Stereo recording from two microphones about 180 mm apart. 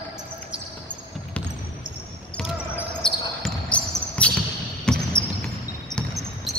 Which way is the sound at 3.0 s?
5° left (ahead or behind).